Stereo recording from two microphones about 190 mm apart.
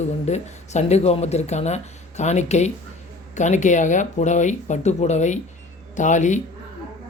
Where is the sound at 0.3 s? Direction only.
35° left (ahead or behind).